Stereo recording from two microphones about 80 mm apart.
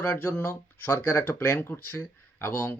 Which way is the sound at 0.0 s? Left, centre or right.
Left.